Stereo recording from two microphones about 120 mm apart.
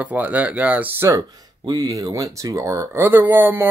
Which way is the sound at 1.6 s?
30° right (ahead or behind).